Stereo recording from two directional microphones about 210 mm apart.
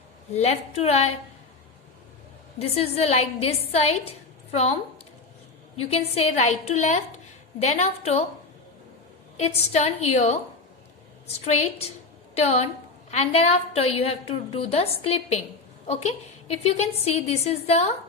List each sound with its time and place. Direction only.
0.3 s a woman's voice: 30° left (ahead or behind)
2.6 s a woman's voice: 30° left (ahead or behind)
5.8 s a woman's voice: 30° left (ahead or behind)
9.4 s a woman's voice: 30° left (ahead or behind)
12.4 s a woman's voice: 30° left (ahead or behind)